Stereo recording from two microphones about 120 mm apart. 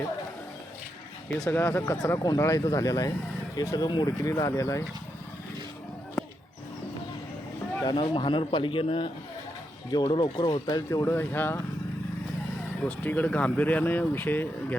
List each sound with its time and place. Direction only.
1.5 s speech: 20° left (ahead or behind)
2.0 s speech: 30° left (ahead or behind)
7.9 s a man's voice: 45° left (ahead or behind)
10.8 s speech: 20° left (ahead or behind)
12.8 s speech: 15° left (ahead or behind)